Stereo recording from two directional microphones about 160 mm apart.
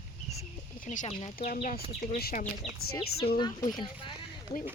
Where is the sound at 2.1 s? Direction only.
70° left (ahead or behind).